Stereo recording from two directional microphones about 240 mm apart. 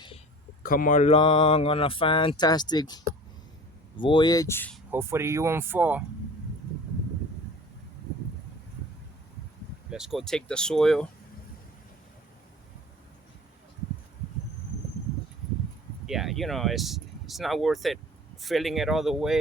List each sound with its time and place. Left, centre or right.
0.6 s speech: left; by 4.8 s centre
4.9 s speech: centre
9.9 s speech: centre
16.0 s speech: centre